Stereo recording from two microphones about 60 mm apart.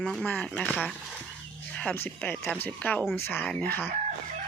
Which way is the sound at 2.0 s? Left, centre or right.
Left.